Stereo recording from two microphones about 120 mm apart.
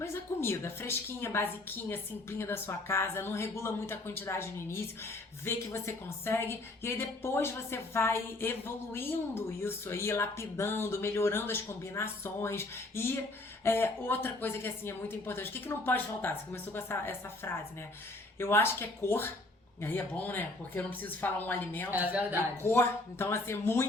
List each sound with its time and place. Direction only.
0.0 s a woman's voice: 20° left (ahead or behind)
21.8 s speech: 15° right (ahead or behind)
22.6 s a woman's voice: 20° left (ahead or behind)